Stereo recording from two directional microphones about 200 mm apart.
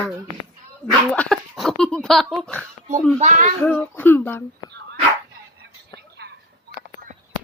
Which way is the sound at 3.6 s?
10° left (ahead or behind).